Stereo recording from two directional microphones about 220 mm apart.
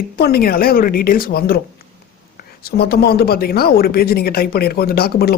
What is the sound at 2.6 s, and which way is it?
Speech, 45° left (ahead or behind).